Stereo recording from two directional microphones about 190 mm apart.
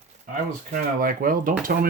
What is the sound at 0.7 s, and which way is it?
Speech, 45° right (ahead or behind).